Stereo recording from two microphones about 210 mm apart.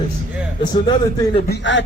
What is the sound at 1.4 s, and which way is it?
Speech, 55° left (ahead or behind).